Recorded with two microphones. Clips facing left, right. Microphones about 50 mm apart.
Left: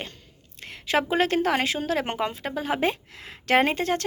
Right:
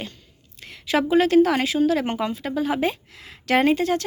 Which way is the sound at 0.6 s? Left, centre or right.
Left.